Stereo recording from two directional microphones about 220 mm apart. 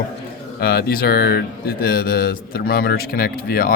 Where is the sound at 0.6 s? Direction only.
45° left (ahead or behind).